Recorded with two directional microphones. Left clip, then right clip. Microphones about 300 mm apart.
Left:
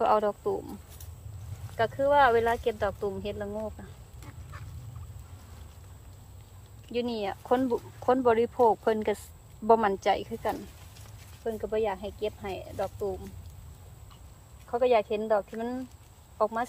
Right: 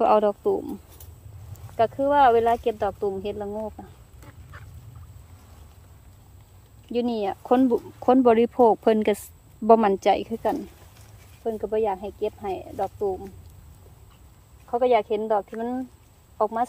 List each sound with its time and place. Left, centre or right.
0.0 s speech: right
1.8 s speech: right
4.2 s duck: centre
6.9 s speech: right
14.7 s speech: right